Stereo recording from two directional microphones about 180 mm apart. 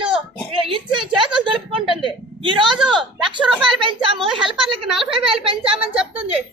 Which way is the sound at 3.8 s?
30° right (ahead or behind).